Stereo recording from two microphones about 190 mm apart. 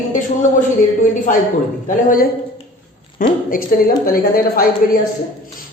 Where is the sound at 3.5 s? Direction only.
50° left (ahead or behind).